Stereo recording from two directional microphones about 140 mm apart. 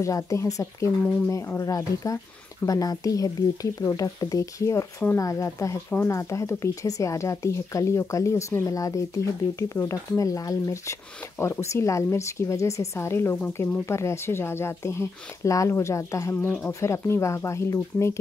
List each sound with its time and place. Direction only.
0.0 s speech: 20° left (ahead or behind)